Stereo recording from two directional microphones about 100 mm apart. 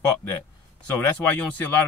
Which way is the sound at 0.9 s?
15° left (ahead or behind).